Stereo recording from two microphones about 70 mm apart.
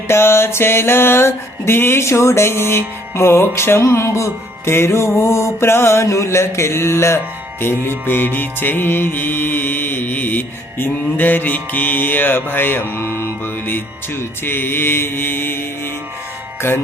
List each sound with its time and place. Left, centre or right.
0.1 s mantra: left
16.6 s speech: left